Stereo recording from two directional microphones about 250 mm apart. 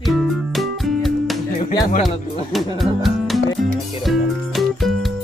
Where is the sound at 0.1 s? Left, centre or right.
Centre.